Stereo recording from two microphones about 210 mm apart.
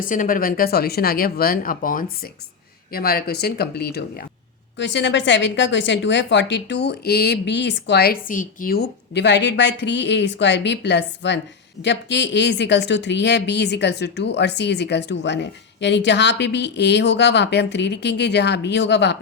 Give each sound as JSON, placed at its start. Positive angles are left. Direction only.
{"t": 0.0, "sound": "speech", "side_deg": 40}